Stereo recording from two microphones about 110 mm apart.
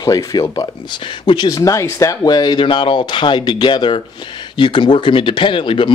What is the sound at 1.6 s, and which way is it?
Speech, 30° left (ahead or behind).